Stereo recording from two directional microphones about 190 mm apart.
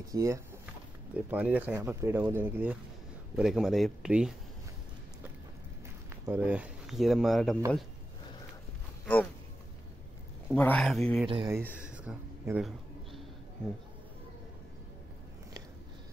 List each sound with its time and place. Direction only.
0.1 s speech: 15° right (ahead or behind)
6.2 s speech: 10° right (ahead or behind)
9.0 s a sound: 10° left (ahead or behind)
10.5 s speech: 5° left (ahead or behind)
11.2 s speech: 25° right (ahead or behind)
11.5 s a sound: 10° right (ahead or behind)